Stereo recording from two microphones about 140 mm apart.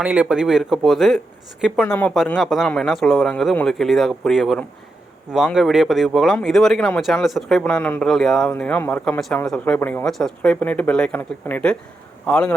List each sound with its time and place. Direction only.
0.0 s speech: 10° right (ahead or behind)
1.9 s a man's voice: 10° left (ahead or behind)